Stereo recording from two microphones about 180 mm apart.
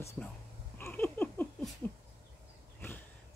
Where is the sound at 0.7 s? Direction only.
10° left (ahead or behind).